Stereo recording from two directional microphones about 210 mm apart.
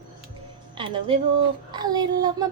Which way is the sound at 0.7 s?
25° right (ahead or behind).